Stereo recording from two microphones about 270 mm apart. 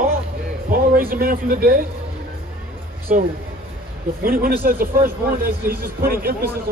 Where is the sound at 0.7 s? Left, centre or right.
Right.